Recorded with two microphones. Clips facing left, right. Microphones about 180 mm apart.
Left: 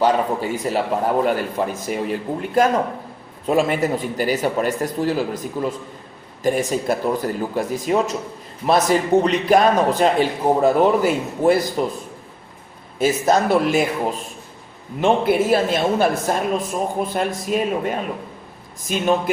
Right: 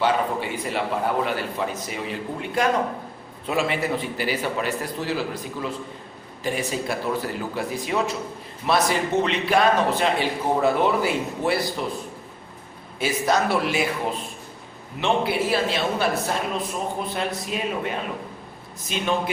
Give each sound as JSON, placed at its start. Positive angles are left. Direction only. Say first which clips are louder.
{"t": 0.0, "sound": "a man's voice", "louder": "left 4 dB", "side_deg": 40}
{"t": 3.4, "sound": "a man's voice", "louder": "left 6 dB", "side_deg": 45}
{"t": 13.0, "sound": "a man's voice", "louder": "left 5 dB", "side_deg": 45}
{"t": 15.0, "sound": "a man's voice", "louder": "left 6 dB", "side_deg": 50}